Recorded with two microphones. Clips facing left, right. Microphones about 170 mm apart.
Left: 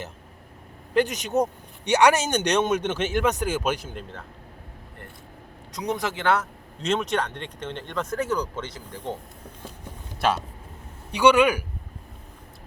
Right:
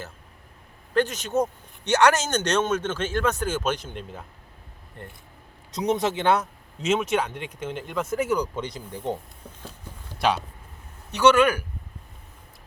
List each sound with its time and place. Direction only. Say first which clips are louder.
0.9 s speech: left 1 dB; 15° left (ahead or behind)
5.7 s speech: right 4 dB; 20° right (ahead or behind)
6.7 s speech: right 1 dB; 5° right (ahead or behind)
10.2 s speech: even; centre (ahead or behind)
11.1 s speech: even; 15° left (ahead or behind)